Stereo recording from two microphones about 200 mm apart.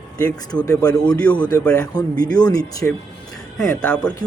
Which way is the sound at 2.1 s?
45° right (ahead or behind).